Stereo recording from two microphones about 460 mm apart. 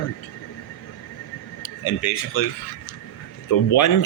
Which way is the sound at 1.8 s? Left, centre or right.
Left.